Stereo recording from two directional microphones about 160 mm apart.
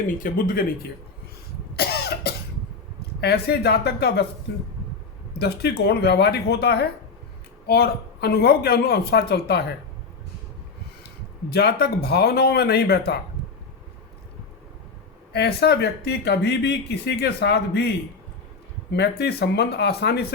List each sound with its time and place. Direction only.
0.2 s speech: 60° left (ahead or behind)
1.7 s cough: 85° left
3.2 s speech: 80° left
5.4 s speech: 90° left
11.4 s speech: 85° left
15.3 s speech: 90° left